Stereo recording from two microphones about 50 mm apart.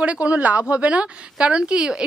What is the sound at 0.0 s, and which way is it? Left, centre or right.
A woman's voice, right.